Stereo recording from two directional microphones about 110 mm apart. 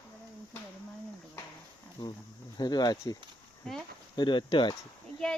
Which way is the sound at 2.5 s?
40° left (ahead or behind).